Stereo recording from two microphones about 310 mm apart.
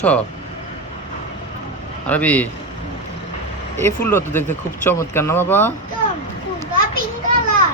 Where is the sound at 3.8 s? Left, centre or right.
Centre.